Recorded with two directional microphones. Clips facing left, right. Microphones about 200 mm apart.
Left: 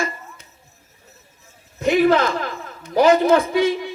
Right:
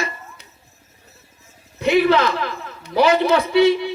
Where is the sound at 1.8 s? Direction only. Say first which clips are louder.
Even; 45° left (ahead or behind).